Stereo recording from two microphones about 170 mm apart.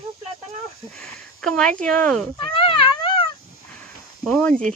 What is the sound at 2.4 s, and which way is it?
Cat, 30° left (ahead or behind).